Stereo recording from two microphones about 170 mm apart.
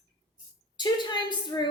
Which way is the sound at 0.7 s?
25° left (ahead or behind).